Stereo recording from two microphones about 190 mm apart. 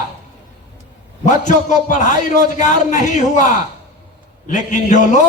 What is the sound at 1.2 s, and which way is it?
A man's voice, 40° left (ahead or behind).